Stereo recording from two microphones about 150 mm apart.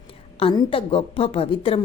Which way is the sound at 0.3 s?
35° left (ahead or behind).